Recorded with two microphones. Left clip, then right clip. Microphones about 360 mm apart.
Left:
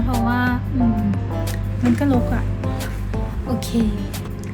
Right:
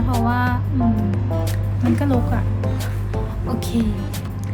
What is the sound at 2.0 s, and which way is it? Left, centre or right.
Speech, centre.